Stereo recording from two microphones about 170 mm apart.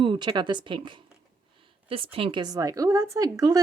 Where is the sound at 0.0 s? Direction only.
30° right (ahead or behind).